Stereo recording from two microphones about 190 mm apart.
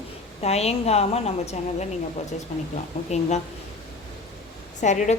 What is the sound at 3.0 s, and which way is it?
Speech, 35° left (ahead or behind).